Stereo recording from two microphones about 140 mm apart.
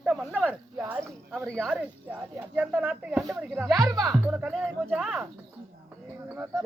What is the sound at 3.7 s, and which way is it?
Speech, 25° right (ahead or behind).